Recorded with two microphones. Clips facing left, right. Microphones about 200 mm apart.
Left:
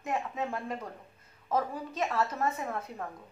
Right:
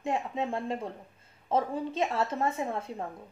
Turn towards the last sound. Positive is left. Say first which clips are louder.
# right 3 dB
turn(degrees=-25)  # may be behind; listen again after turning